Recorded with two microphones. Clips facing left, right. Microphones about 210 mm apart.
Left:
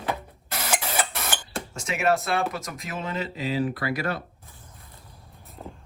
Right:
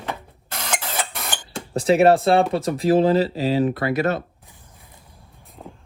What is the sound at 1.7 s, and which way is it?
Speech, 35° right (ahead or behind).